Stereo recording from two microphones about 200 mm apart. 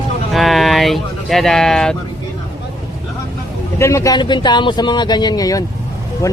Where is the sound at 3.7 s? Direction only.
15° left (ahead or behind).